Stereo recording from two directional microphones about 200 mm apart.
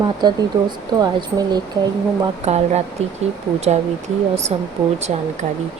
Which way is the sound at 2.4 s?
35° right (ahead or behind).